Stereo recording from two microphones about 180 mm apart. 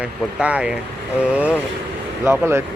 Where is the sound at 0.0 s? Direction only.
5° right (ahead or behind).